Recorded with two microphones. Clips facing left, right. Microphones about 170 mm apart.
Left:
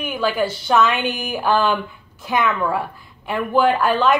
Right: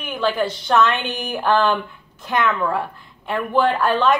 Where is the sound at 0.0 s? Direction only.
5° left (ahead or behind).